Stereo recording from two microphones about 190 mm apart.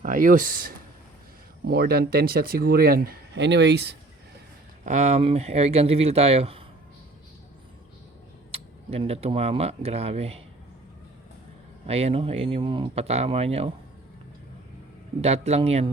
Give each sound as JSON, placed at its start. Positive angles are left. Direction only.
{"t": 0.0, "sound": "speech", "side_deg": -45}
{"t": 4.9, "sound": "speech", "side_deg": -35}
{"t": 8.5, "sound": "speech", "side_deg": -30}
{"t": 11.9, "sound": "speech", "side_deg": -35}
{"t": 15.2, "sound": "speech", "side_deg": -35}